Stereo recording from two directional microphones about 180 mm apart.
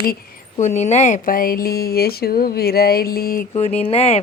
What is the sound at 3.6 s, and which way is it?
Speech, 35° left (ahead or behind).